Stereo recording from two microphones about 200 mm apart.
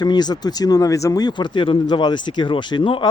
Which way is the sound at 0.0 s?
20° left (ahead or behind).